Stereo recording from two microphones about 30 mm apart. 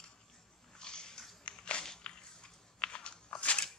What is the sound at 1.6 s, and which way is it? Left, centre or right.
Walk, left.